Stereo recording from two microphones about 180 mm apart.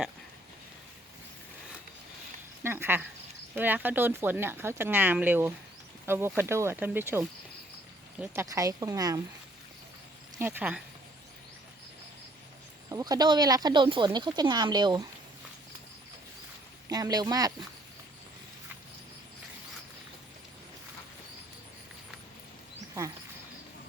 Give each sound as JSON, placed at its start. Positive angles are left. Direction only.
{"t": 2.6, "sound": "speech", "side_deg": -15}
{"t": 10.3, "sound": "speech", "side_deg": -10}
{"t": 12.9, "sound": "speech", "side_deg": -20}
{"t": 16.9, "sound": "speech", "side_deg": -20}